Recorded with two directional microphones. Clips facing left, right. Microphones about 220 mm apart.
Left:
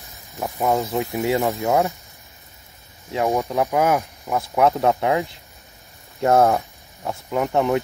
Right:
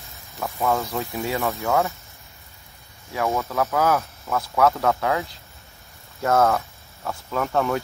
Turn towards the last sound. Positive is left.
turn(degrees=20)  # may be behind; listen again after turning